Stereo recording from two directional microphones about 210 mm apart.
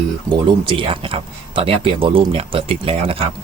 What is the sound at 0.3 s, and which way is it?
Speech, 20° right (ahead or behind).